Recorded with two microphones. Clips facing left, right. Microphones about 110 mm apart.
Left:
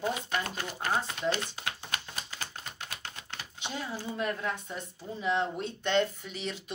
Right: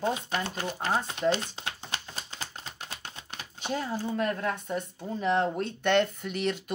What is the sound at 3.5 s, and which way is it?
Speech, 45° right (ahead or behind).